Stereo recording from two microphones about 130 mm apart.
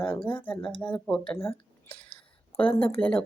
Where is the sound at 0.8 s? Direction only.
10° left (ahead or behind).